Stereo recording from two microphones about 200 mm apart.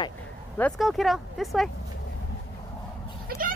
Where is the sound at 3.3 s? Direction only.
50° right (ahead or behind).